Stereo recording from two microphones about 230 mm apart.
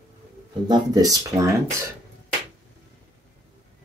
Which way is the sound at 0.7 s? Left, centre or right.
Centre.